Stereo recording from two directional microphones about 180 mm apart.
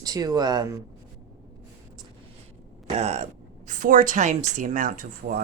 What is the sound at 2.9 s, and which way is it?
A woman's voice, 35° right (ahead or behind).